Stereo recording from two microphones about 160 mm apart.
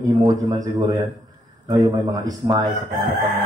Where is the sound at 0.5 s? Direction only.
25° right (ahead or behind).